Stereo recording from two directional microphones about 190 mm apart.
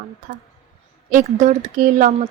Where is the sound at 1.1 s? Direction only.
45° right (ahead or behind).